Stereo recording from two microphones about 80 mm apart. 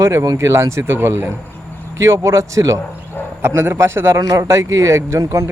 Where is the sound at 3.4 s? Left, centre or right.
Right.